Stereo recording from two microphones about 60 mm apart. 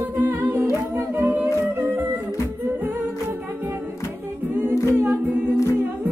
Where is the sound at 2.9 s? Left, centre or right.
Right.